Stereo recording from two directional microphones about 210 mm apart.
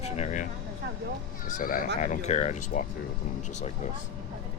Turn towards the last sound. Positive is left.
turn(degrees=35)  # may be behind; listen again after turning